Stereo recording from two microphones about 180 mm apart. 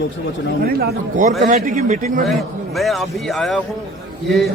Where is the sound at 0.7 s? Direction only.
55° right (ahead or behind).